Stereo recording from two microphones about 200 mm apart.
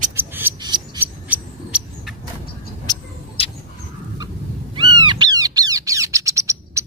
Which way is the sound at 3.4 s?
30° left (ahead or behind).